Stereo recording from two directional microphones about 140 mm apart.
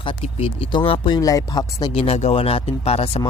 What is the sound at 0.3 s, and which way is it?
Speech, 40° left (ahead or behind).